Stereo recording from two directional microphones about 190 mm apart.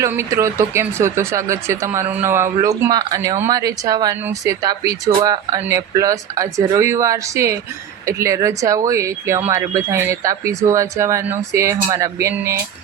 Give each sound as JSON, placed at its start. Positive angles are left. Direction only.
{"t": 0.0, "sound": "speech", "side_deg": -15}